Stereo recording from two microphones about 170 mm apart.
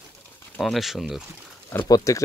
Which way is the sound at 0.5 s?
Centre (ahead or behind).